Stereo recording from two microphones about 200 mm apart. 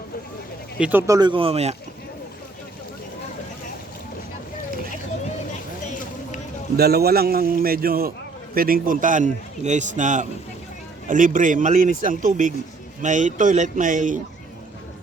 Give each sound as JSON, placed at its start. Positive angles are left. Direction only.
{"t": 0.8, "sound": "speech", "side_deg": -10}
{"t": 6.7, "sound": "a man's voice", "side_deg": -50}